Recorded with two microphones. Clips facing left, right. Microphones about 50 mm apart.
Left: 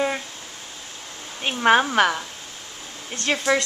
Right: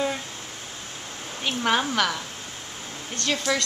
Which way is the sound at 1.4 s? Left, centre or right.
Left.